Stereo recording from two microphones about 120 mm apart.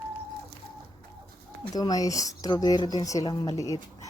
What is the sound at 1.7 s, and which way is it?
A woman's voice, 30° left (ahead or behind).